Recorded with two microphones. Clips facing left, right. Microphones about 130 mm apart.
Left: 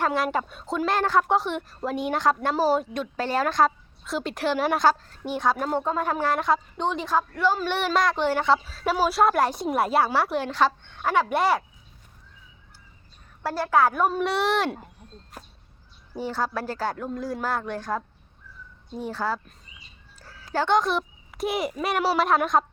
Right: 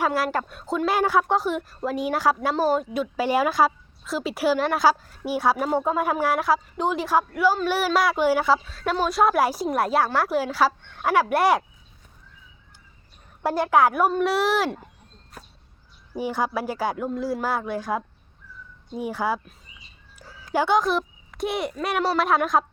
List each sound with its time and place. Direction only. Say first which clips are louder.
0.0 s a woman's voice: right 1 dB; 5° right (ahead or behind)
13.4 s speech: right 2 dB; 15° right (ahead or behind)
14.1 s a woman's voice: right 2 dB; centre (ahead or behind)
16.1 s speech: right 2 dB; 15° right (ahead or behind)
20.1 s a sound: right 3 dB; 15° right (ahead or behind)
20.7 s a woman's voice: right 1 dB; centre (ahead or behind)